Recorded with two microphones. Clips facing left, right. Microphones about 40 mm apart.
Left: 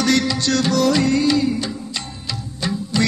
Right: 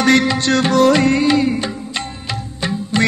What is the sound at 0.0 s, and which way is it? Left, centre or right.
Music, right.